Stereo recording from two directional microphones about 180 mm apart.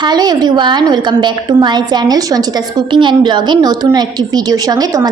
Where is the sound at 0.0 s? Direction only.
25° right (ahead or behind).